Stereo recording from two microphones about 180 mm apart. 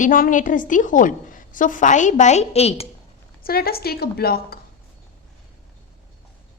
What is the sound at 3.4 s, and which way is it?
A woman's voice, 55° left (ahead or behind).